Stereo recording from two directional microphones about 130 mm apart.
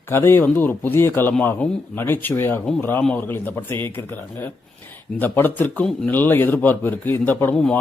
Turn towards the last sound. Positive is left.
turn(degrees=15)  # may be behind; listen again after turning